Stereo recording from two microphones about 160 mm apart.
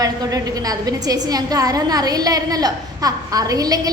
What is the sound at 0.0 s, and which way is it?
A woman's voice, 25° right (ahead or behind).